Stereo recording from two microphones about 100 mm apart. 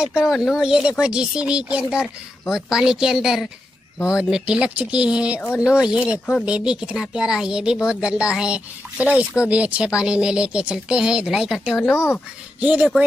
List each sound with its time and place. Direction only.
0.0 s a woman's voice: 5° right (ahead or behind)
11.8 s speech: 25° left (ahead or behind)
12.5 s speech: 15° right (ahead or behind)